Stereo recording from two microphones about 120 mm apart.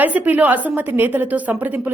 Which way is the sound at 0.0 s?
15° right (ahead or behind).